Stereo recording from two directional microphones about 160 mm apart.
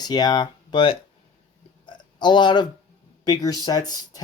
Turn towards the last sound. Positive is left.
turn(degrees=25)  # may be behind; listen again after turning